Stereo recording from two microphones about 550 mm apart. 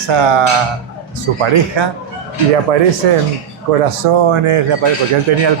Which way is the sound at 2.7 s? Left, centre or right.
Right.